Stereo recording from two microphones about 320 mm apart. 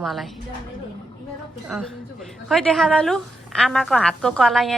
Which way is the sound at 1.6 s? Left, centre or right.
Centre.